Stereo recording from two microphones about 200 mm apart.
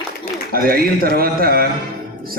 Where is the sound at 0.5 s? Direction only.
50° right (ahead or behind).